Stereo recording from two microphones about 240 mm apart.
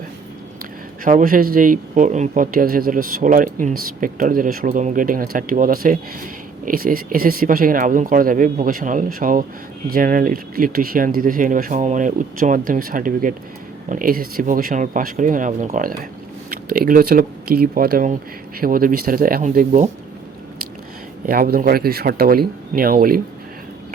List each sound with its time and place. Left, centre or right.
1.0 s speech: right
21.2 s speech: right